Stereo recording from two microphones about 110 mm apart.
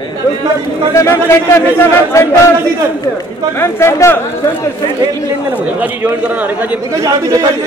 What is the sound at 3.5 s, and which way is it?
Speech, 20° left (ahead or behind).